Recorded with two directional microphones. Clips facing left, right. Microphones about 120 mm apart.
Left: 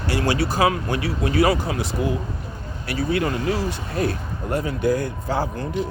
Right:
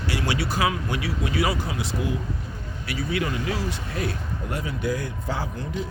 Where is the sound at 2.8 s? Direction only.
40° left (ahead or behind).